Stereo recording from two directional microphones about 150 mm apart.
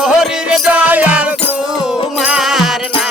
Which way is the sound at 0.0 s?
5° right (ahead or behind).